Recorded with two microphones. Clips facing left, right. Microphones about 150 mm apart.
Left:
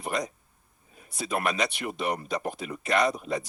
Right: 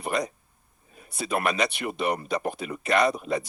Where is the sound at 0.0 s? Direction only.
65° right (ahead or behind).